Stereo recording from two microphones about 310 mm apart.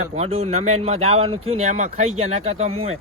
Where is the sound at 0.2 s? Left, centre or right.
Centre.